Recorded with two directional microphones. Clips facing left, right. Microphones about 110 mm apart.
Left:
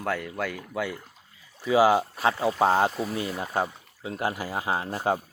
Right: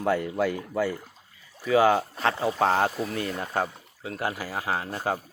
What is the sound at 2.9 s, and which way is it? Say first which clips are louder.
Speech: even; centre (ahead or behind).